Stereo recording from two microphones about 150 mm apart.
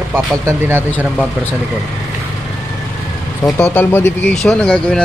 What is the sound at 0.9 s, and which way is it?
Speech, 10° left (ahead or behind).